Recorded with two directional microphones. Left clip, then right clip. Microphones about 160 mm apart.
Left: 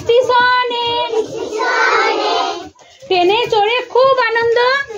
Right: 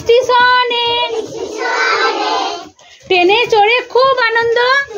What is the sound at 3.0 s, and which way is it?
A woman's voice, 30° right (ahead or behind).